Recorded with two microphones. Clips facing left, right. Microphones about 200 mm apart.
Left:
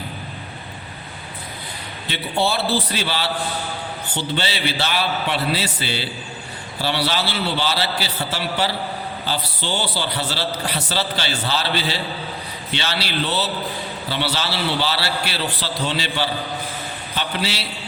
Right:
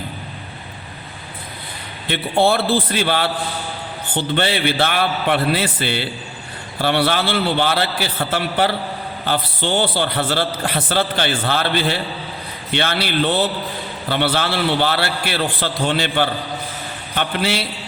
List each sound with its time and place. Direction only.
2.0 s a man's voice: 55° right (ahead or behind)